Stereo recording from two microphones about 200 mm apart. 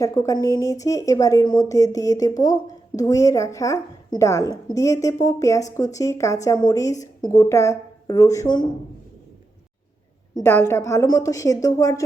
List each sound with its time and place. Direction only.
0.0 s a woman's voice: 15° left (ahead or behind)
10.3 s a woman's voice: 10° left (ahead or behind)